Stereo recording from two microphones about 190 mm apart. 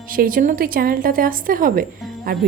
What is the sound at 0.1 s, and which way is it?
A woman's voice, 45° right (ahead or behind).